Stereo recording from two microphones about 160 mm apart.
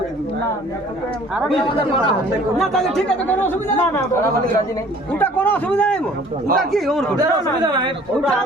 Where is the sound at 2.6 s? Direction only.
5° left (ahead or behind).